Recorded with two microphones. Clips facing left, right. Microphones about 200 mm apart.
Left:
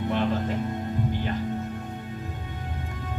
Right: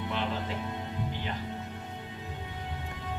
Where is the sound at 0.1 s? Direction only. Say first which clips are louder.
Left 8 dB; 45° left (ahead or behind).